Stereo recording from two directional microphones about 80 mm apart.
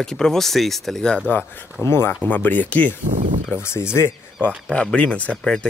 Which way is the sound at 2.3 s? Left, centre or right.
Left.